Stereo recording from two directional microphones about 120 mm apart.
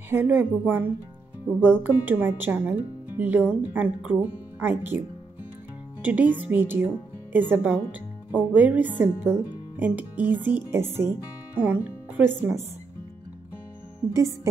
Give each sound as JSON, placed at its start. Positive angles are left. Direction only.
{"t": 0.1, "sound": "speech", "side_deg": -15}
{"t": 6.0, "sound": "speech", "side_deg": -15}
{"t": 14.1, "sound": "speech", "side_deg": -25}